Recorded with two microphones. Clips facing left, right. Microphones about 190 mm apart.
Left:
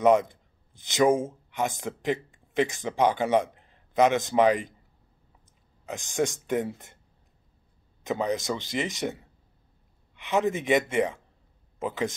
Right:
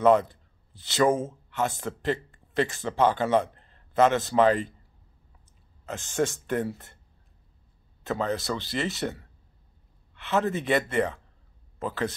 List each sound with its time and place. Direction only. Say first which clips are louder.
0.0 s speech: even; 15° left (ahead or behind)
5.9 s speech: even; 15° left (ahead or behind)
8.0 s speech: left 1 dB; 15° left (ahead or behind)